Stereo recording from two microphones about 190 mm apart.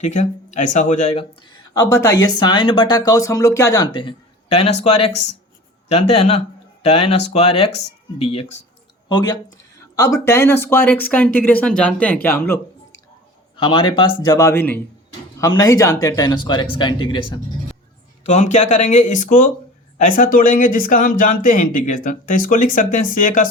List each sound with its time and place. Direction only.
0.0 s speech: 40° left (ahead or behind); by 12.5 s 10° left (ahead or behind)
13.6 s speech: 25° left (ahead or behind)
18.2 s speech: 40° left (ahead or behind)